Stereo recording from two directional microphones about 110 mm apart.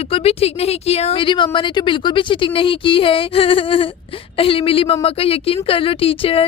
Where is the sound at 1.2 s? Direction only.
50° left (ahead or behind).